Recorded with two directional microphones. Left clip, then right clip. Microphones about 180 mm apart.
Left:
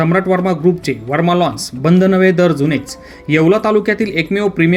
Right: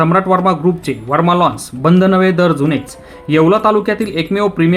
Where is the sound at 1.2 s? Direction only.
10° left (ahead or behind).